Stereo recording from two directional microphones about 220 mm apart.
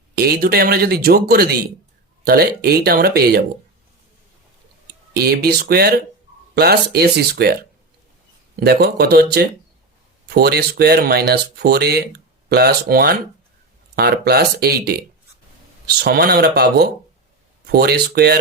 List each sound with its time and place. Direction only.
0.2 s speech: 45° right (ahead or behind)
5.1 s speech: 45° right (ahead or behind)